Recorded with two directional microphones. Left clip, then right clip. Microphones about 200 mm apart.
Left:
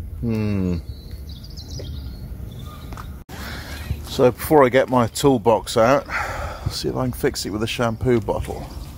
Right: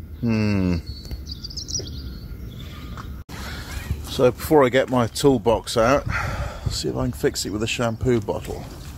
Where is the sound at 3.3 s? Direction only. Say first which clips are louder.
Left 1 dB; 20° left (ahead or behind).